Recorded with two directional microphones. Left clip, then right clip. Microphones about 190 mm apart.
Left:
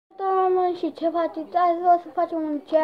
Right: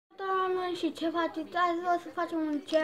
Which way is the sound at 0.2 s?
10° right (ahead or behind).